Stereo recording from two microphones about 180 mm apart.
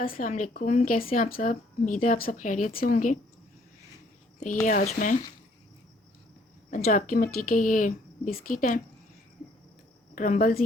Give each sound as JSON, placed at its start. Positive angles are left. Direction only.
{"t": 0.0, "sound": "speech", "side_deg": 50}
{"t": 4.6, "sound": "speech", "side_deg": 45}
{"t": 6.8, "sound": "speech", "side_deg": 50}
{"t": 10.2, "sound": "speech", "side_deg": 50}